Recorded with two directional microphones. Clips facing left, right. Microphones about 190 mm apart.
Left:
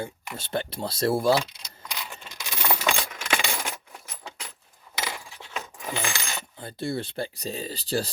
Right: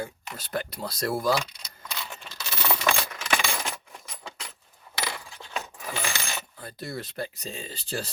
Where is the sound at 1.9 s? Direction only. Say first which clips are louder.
Even; 15° left (ahead or behind).